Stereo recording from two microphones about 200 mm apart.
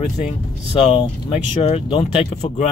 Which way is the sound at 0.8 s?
25° left (ahead or behind).